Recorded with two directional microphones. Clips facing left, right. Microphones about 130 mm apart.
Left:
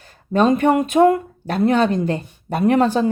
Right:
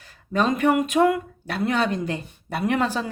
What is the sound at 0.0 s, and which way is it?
Speech, 35° left (ahead or behind).